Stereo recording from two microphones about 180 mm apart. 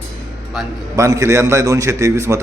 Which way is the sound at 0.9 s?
15° right (ahead or behind).